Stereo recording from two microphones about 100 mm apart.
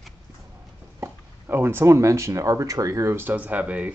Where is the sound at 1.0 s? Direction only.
25° right (ahead or behind).